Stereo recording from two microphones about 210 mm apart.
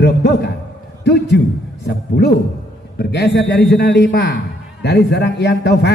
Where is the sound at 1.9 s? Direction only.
50° left (ahead or behind).